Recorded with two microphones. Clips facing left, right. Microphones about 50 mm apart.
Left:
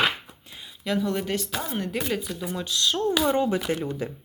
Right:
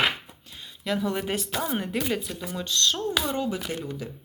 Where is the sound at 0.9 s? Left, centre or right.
Centre.